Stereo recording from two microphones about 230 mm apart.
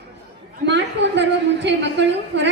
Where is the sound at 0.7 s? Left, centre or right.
Right.